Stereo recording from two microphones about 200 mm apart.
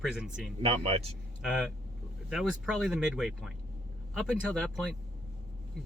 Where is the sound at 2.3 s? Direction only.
Centre (ahead or behind).